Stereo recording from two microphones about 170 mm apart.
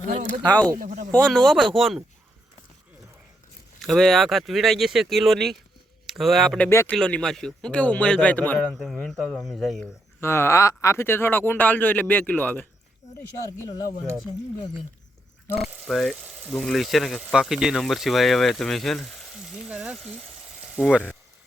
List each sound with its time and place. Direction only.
0.4 s speech: 10° left (ahead or behind)
0.8 s speech: 45° right (ahead or behind)
1.1 s speech: 5° left (ahead or behind)
3.8 s speech: centre (ahead or behind)
6.7 s speech: 15° left (ahead or behind)
6.9 s speech: 5° left (ahead or behind)
10.2 s speech: 15° left (ahead or behind)
13.6 s speech: 20° left (ahead or behind)
15.5 s speech: centre (ahead or behind)